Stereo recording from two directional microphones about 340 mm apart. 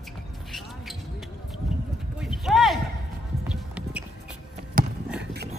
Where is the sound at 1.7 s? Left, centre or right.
Centre.